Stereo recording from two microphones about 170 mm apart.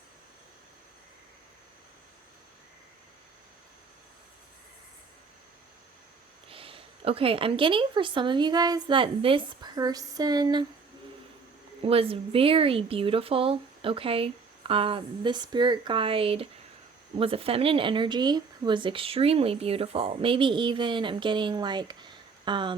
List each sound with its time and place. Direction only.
6.5 s speech: 35° right (ahead or behind)
11.8 s speech: 35° right (ahead or behind)